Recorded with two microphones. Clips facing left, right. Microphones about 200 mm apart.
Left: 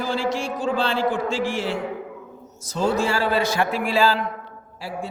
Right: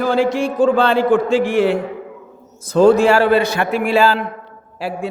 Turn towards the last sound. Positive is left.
turn(degrees=-70)  # may be behind; listen again after turning